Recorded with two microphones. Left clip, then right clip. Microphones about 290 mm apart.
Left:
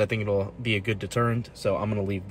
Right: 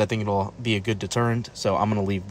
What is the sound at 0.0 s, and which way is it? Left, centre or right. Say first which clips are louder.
Speech: right 1 dB; centre.